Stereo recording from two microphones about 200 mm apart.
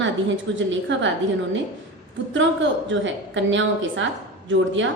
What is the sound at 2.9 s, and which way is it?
A woman's voice, 70° right (ahead or behind).